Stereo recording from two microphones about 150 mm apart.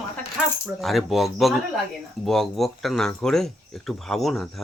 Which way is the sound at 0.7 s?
Centre (ahead or behind).